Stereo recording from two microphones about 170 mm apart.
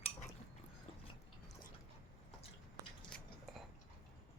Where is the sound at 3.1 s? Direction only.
5° left (ahead or behind).